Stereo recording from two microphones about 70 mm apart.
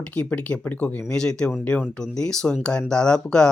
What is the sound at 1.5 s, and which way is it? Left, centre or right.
Speech, left.